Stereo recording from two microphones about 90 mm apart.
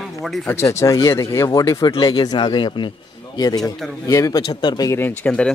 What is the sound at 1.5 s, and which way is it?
Speech, 45° left (ahead or behind).